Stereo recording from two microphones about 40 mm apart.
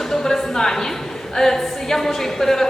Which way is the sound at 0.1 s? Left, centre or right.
Centre.